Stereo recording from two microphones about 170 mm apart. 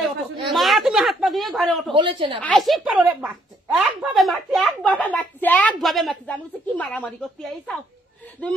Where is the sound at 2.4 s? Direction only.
5° left (ahead or behind).